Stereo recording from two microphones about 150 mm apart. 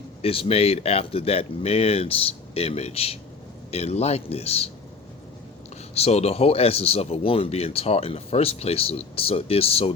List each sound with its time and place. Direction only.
0.2 s speech: 40° left (ahead or behind)
5.9 s speech: 45° left (ahead or behind)